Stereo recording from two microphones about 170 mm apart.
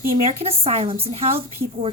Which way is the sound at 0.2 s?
35° right (ahead or behind).